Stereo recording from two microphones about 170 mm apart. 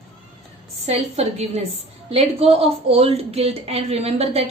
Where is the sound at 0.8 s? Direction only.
40° right (ahead or behind).